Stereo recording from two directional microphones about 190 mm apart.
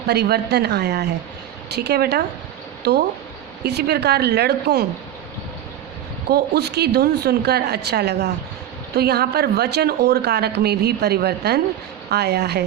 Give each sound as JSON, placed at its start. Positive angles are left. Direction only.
{"t": 0.1, "sound": "speech", "side_deg": -60}
{"t": 6.3, "sound": "speech", "side_deg": -60}